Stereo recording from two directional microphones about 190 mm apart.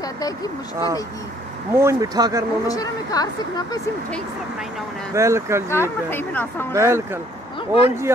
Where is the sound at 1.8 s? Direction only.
15° right (ahead or behind).